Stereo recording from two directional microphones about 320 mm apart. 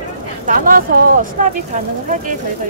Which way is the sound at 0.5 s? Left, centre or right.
Right.